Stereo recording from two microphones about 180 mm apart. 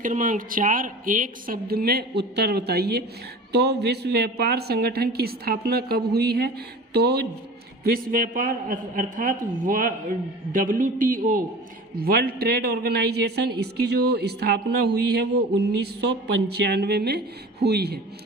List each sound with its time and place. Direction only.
0.0 s a woman's voice: 45° right (ahead or behind); by 7.3 s 65° right (ahead or behind)
7.9 s a man's voice: 55° right (ahead or behind)